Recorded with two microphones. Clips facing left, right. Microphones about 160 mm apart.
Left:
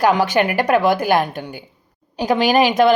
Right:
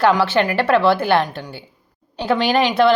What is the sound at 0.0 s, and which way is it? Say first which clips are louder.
A woman's voice: even; 15° left (ahead or behind).